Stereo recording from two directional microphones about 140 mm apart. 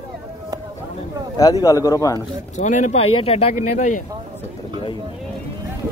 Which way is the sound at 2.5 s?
60° left (ahead or behind).